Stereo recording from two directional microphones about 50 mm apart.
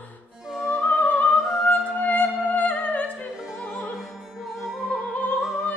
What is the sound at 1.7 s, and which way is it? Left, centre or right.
Music, left.